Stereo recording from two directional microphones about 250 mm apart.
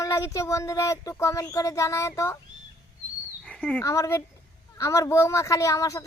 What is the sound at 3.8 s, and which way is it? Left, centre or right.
A woman's voice, centre.